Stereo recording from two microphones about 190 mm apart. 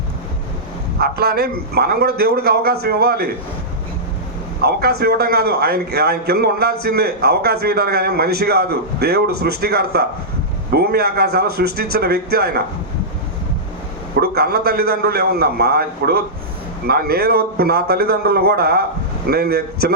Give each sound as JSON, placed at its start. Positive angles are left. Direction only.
{"t": 0.9, "sound": "a man's voice", "side_deg": -55}
{"t": 4.6, "sound": "a man's voice", "side_deg": -55}
{"t": 14.2, "sound": "a man's voice", "side_deg": -55}